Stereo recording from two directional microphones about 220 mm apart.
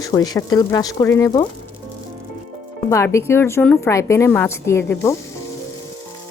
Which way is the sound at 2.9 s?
15° left (ahead or behind).